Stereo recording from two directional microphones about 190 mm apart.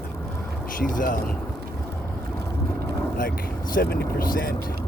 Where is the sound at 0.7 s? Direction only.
45° left (ahead or behind).